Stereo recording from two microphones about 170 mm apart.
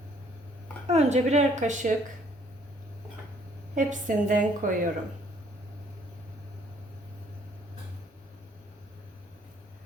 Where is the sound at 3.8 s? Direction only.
50° right (ahead or behind).